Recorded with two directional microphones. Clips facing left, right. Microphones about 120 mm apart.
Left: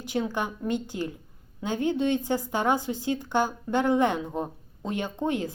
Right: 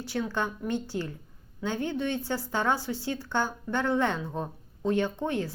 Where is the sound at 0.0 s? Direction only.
15° left (ahead or behind).